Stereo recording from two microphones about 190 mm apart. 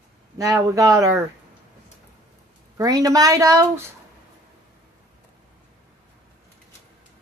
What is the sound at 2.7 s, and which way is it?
A woman's voice, 20° right (ahead or behind).